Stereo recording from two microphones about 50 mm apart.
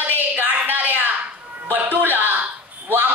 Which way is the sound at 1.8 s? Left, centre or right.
Right.